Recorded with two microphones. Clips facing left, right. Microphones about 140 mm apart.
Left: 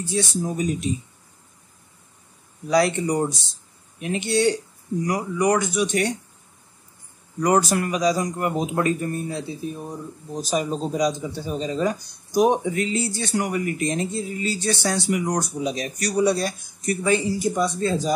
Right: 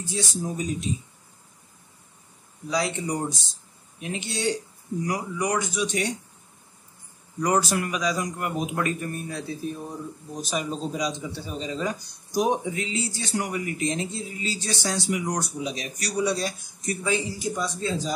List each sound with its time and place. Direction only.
0.1 s speech: 65° left (ahead or behind)
2.7 s speech: 65° left (ahead or behind)
7.4 s a man's voice: 55° left (ahead or behind); by 9.9 s 15° left (ahead or behind)
10.3 s a man's voice: 35° left (ahead or behind)
12.4 s a man's voice: 60° left (ahead or behind)